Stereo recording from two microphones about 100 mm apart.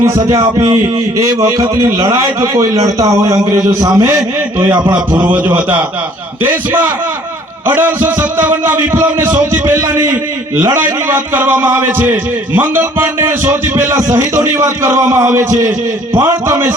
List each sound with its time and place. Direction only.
0.0 s a man's voice: 35° right (ahead or behind)
4.6 s a sound: 45° right (ahead or behind)
6.4 s a man's voice: 20° right (ahead or behind); by 10.2 s 35° right (ahead or behind)
10.8 s a man's voice: 20° right (ahead or behind); by 16.6 s 40° right (ahead or behind)